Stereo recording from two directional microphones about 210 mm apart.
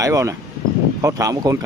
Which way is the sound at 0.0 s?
15° right (ahead or behind).